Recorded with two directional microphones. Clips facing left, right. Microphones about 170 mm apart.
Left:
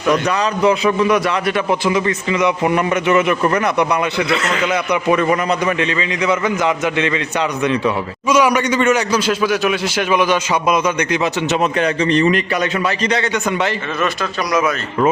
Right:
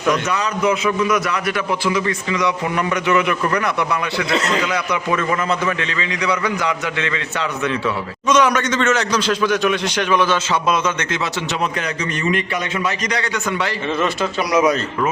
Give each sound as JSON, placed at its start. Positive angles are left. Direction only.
{"t": 0.3, "sound": "a man's voice", "side_deg": 35}
{"t": 4.6, "sound": "a man's voice", "side_deg": 20}